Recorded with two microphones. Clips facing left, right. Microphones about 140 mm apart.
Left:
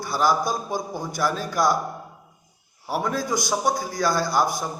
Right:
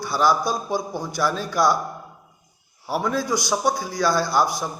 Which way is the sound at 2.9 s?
45° left (ahead or behind).